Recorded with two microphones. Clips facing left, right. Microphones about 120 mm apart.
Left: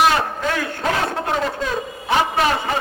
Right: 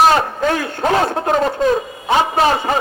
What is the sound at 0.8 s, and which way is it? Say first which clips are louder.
Speech: right 5 dB; 25° right (ahead or behind).